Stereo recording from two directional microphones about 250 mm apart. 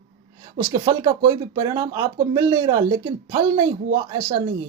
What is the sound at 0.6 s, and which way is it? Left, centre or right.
Speech, centre.